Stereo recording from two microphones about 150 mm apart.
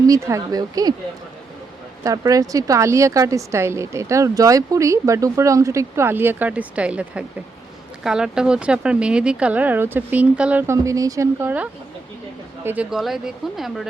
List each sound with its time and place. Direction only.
0.1 s a woman's voice: 20° right (ahead or behind)
2.0 s a woman's voice: 25° right (ahead or behind); by 13.8 s centre (ahead or behind)